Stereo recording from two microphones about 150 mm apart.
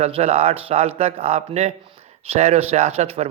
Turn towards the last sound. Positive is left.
turn(degrees=-45)  # may be behind; listen again after turning